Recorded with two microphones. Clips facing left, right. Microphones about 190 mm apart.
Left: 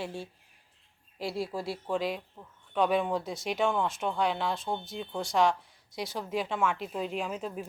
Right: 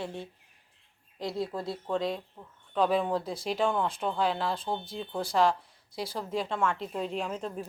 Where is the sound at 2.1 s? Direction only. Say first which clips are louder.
Right 1 dB; centre (ahead or behind).